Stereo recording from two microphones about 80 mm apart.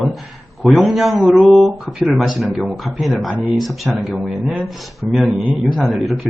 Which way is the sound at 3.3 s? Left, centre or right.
Centre.